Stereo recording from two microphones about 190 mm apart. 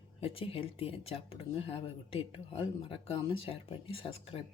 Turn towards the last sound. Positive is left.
turn(degrees=30)  # may be behind; listen again after turning